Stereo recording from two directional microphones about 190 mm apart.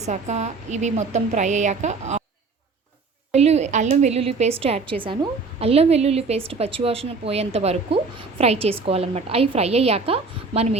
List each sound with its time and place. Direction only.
0.0 s a woman's voice: 35° right (ahead or behind)
3.3 s a woman's voice: 35° right (ahead or behind)